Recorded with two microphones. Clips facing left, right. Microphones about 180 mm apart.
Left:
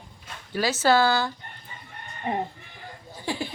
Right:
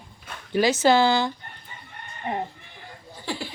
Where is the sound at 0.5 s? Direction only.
15° right (ahead or behind).